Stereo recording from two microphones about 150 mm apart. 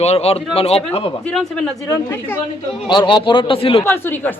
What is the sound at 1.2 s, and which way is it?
Speech, 5° left (ahead or behind).